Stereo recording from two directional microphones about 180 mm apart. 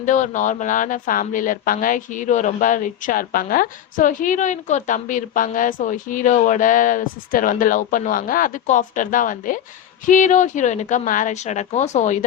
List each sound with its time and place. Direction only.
0.0 s a woman's voice: 45° left (ahead or behind)